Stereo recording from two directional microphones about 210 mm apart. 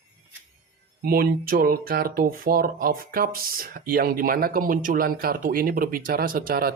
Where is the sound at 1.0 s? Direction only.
45° right (ahead or behind).